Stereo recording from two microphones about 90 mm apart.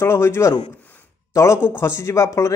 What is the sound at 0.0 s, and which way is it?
A man's voice, 30° left (ahead or behind).